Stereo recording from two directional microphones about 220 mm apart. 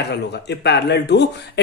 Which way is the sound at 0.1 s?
50° left (ahead or behind).